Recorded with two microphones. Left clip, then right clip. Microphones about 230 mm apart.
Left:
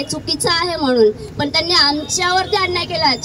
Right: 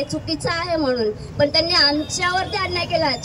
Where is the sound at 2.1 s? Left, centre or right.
Left.